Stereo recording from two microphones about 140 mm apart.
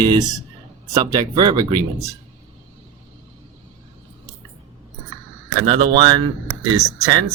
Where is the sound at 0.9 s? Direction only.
25° right (ahead or behind).